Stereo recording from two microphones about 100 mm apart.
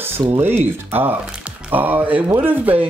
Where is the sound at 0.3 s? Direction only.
20° right (ahead or behind).